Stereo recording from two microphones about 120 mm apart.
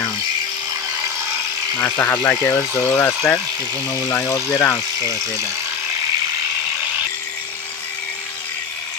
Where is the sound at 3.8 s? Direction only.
15° left (ahead or behind).